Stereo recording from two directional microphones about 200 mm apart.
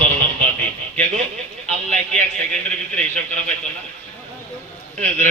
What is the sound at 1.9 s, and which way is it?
Speech, 40° right (ahead or behind).